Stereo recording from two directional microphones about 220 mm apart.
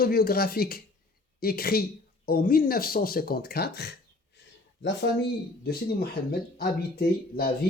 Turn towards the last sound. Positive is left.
turn(degrees=45)  # may be behind; listen again after turning